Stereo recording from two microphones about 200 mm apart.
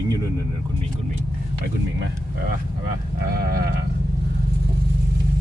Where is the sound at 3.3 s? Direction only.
50° right (ahead or behind).